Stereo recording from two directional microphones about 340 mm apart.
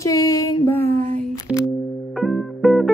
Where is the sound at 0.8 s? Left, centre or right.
Right.